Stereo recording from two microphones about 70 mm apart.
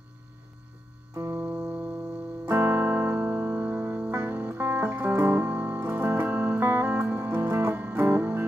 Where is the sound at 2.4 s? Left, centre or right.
Right.